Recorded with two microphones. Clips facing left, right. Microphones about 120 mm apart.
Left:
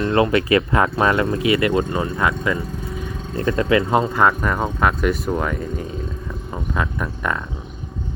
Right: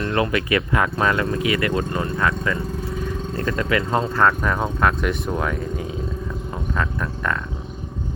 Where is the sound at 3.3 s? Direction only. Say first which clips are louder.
Left 5 dB; 25° left (ahead or behind).